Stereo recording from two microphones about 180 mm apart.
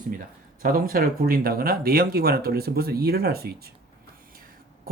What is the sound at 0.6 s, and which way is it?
Speech, 55° right (ahead or behind).